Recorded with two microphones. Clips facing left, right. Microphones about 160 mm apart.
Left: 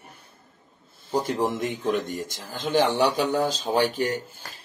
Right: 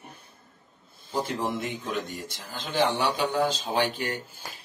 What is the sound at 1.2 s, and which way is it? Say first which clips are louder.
Speech: left 4 dB; 40° left (ahead or behind).